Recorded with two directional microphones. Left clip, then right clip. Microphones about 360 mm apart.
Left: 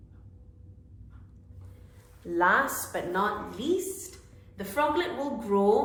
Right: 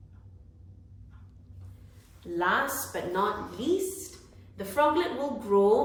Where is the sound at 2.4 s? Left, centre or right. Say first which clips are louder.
Left 3 dB; centre.